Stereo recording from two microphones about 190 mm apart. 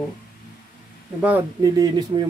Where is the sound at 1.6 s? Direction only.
20° right (ahead or behind).